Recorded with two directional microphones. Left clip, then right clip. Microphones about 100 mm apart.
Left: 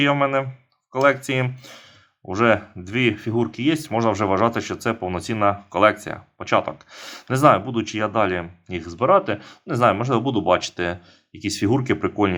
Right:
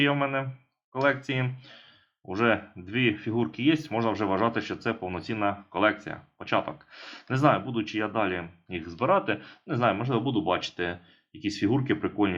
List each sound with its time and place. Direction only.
0.0 s speech: 60° left (ahead or behind); by 3.9 s 45° left (ahead or behind)
3.9 s speech: 80° left